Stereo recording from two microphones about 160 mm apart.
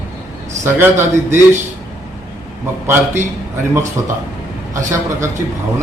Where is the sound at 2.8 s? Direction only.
15° right (ahead or behind).